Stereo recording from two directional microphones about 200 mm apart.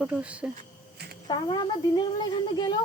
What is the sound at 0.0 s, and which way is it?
Speech, 5° right (ahead or behind).